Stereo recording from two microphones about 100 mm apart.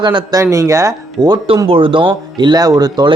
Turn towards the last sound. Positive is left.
turn(degrees=-45)  # may be behind; listen again after turning